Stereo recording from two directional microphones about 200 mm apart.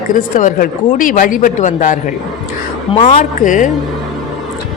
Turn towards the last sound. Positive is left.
turn(degrees=40)  # may be behind; listen again after turning